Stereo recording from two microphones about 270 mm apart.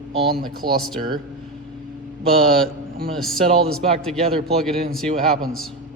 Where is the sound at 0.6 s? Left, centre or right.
Centre.